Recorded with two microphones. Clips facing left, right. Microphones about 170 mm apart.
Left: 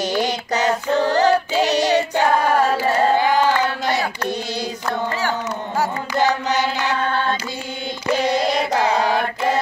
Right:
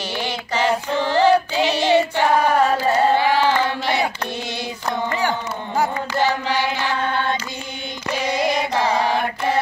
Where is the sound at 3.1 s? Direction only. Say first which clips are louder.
Left 1 dB; 45° left (ahead or behind).